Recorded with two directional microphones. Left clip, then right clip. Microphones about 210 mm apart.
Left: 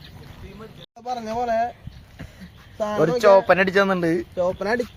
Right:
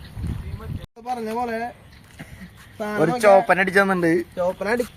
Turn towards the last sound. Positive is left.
turn(degrees=10)  # may be behind; listen again after turning